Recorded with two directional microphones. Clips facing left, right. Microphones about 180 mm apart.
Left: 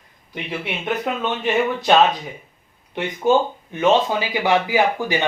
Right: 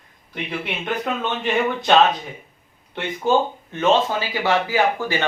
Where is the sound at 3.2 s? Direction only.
15° left (ahead or behind).